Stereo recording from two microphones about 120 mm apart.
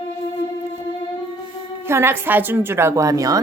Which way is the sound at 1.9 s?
20° right (ahead or behind).